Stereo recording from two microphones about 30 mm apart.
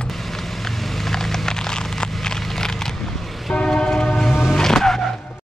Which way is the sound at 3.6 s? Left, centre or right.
Left.